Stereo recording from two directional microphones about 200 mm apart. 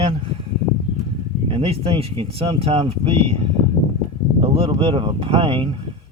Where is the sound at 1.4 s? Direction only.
25° right (ahead or behind).